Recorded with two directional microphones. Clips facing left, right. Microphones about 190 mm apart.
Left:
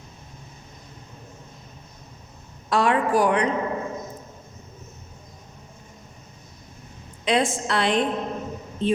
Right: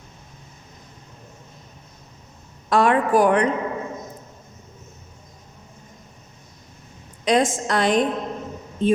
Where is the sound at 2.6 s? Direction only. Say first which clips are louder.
Right 3 dB; 50° right (ahead or behind).